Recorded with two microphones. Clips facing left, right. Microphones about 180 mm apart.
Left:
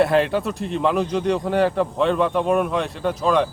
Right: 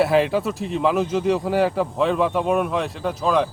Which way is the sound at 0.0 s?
Centre (ahead or behind).